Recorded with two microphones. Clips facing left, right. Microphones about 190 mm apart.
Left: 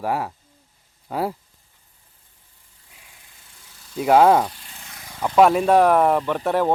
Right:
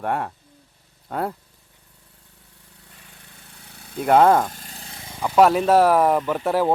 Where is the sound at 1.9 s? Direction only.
75° right (ahead or behind).